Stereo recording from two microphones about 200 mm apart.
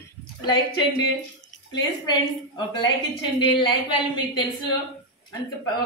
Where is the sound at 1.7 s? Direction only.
20° left (ahead or behind).